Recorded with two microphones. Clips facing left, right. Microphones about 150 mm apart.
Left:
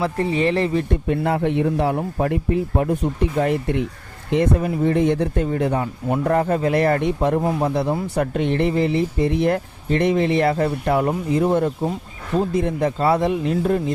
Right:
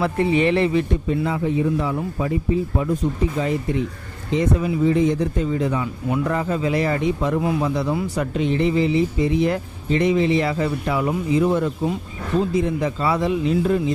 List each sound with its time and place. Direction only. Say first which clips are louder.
0.0 s speech: right 1 dB; 35° left (ahead or behind)
1.0 s speech: left 2 dB; 60° left (ahead or behind)
7.3 s speech: left 1 dB; 40° left (ahead or behind)
8.0 s speech: left 1 dB; 55° left (ahead or behind)
12.5 s speech: left 1 dB; 55° left (ahead or behind)